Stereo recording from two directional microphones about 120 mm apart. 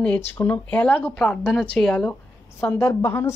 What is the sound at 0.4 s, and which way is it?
A woman's voice, 10° left (ahead or behind).